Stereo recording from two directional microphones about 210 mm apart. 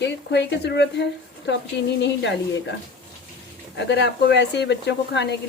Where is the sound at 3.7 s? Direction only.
55° left (ahead or behind).